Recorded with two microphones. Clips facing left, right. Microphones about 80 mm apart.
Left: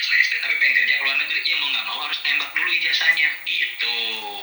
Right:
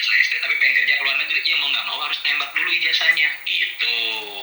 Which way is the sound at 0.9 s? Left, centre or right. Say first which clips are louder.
Right 1 dB; right.